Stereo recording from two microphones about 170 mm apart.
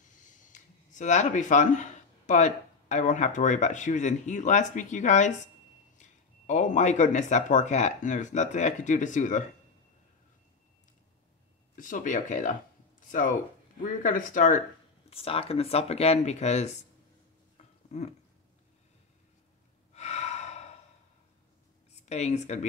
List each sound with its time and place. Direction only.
0.2 s speech: 50° left (ahead or behind)
11.7 s speech: 50° left (ahead or behind)
14.0 s speech: 50° left (ahead or behind)
15.0 s speech: 35° left (ahead or behind)
17.6 s a sound: 40° left (ahead or behind)
19.9 s gasp: 40° left (ahead or behind)
22.0 s speech: 40° left (ahead or behind)